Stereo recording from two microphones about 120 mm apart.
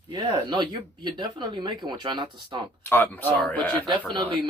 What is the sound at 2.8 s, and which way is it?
Speech, 15° left (ahead or behind).